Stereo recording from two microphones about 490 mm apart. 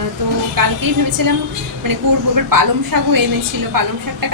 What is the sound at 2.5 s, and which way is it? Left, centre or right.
A woman's voice, right.